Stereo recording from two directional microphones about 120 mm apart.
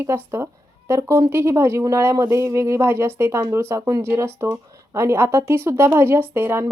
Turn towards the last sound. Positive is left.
turn(degrees=-20)  # may be behind; listen again after turning